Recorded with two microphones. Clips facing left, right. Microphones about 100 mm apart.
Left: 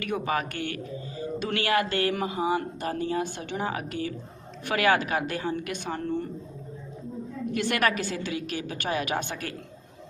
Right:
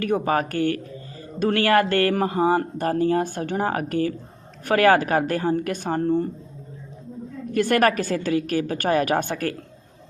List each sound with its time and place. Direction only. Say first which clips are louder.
0.0 s speech: right 6 dB; 40° right (ahead or behind)
7.5 s speech: right 7 dB; 45° right (ahead or behind)